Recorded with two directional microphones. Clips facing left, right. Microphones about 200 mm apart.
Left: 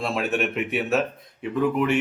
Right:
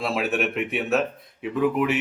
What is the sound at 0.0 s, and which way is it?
Mantra, centre (ahead or behind).